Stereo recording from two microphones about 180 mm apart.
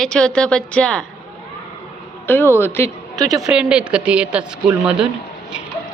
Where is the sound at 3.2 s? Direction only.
Centre (ahead or behind).